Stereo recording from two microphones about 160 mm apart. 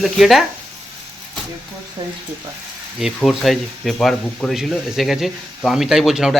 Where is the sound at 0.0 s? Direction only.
Centre (ahead or behind).